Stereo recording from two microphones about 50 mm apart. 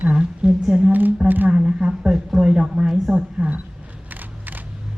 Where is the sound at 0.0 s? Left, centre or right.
Right.